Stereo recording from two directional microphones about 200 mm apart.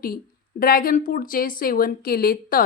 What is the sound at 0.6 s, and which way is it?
A woman's voice, 45° left (ahead or behind).